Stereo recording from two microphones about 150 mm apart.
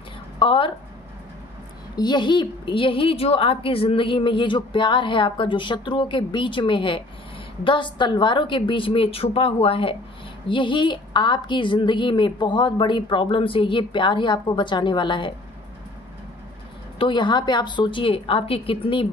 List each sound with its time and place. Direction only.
0.4 s a woman's voice: 35° left (ahead or behind)
2.0 s a woman's voice: 30° left (ahead or behind)
17.0 s a woman's voice: 30° left (ahead or behind)